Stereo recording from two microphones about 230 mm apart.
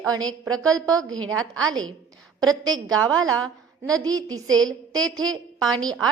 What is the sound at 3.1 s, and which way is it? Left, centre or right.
Speech, right.